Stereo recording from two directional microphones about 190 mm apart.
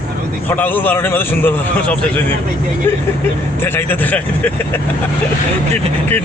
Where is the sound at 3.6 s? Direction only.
10° left (ahead or behind).